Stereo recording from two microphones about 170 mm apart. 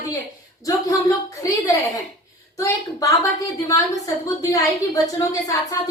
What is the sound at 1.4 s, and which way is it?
A woman's voice, 20° left (ahead or behind).